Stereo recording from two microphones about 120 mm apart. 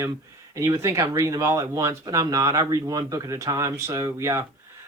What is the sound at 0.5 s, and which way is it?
Speech, 25° right (ahead or behind).